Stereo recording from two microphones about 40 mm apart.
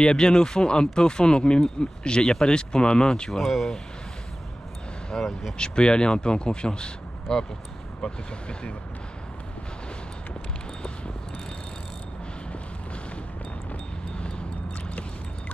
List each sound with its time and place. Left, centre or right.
0.0 s speech: left
3.3 s speech: centre
5.1 s speech: centre
5.6 s speech: left
8.0 s speech: left
14.1 s vehicle: left